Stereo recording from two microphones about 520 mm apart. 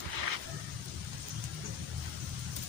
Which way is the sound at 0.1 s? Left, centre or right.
Right.